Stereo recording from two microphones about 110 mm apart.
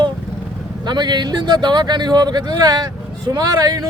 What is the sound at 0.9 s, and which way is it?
Speech, 40° right (ahead or behind).